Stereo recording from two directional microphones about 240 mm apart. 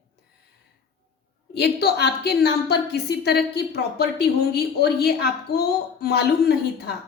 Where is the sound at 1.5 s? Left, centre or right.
Left.